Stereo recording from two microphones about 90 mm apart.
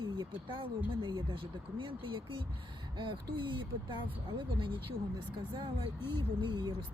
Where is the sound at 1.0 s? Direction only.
60° right (ahead or behind).